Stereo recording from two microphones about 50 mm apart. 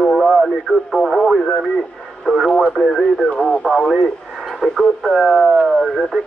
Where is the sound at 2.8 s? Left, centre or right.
Left.